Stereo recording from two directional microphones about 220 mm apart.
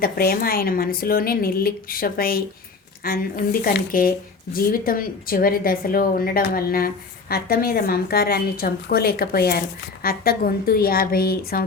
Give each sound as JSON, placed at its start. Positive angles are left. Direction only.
{"t": 0.0, "sound": "a woman's voice", "side_deg": 40}